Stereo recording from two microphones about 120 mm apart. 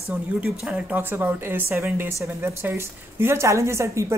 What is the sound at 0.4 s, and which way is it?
Speech, 10° right (ahead or behind).